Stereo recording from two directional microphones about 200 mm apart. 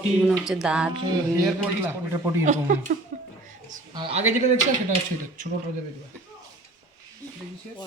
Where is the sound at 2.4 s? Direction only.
40° right (ahead or behind).